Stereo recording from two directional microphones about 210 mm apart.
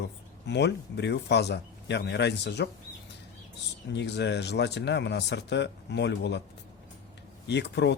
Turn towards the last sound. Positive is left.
turn(degrees=55)  # may be behind; listen again after turning